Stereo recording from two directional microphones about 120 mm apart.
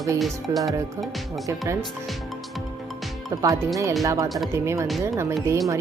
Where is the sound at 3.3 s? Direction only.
25° right (ahead or behind).